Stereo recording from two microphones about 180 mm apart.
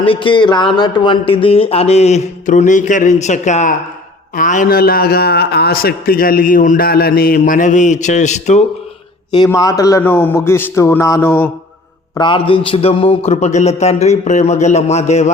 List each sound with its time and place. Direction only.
0.0 s a man's voice: 30° left (ahead or behind)
9.3 s a man's voice: 20° left (ahead or behind)
12.1 s speech: 25° left (ahead or behind)